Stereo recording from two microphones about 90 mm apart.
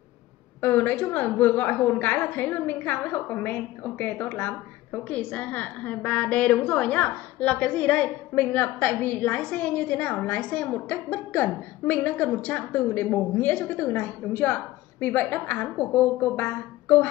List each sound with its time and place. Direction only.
0.6 s a woman's voice: 20° left (ahead or behind)